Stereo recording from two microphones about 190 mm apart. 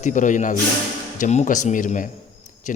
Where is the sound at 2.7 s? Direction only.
40° left (ahead or behind).